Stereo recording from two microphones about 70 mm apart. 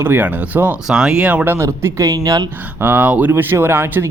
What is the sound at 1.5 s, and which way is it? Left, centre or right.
Speech, right.